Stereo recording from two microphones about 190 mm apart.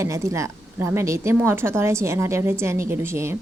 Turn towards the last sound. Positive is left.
turn(degrees=-15)  # may be behind; listen again after turning